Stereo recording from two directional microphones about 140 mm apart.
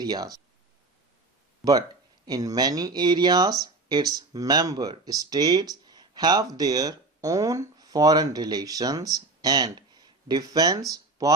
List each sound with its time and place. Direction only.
0.0 s speech: 30° right (ahead or behind)
1.6 s speech: centre (ahead or behind)
2.2 s speech: 25° right (ahead or behind)